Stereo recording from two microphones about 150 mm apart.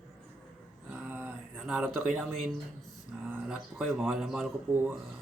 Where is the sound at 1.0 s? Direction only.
10° right (ahead or behind).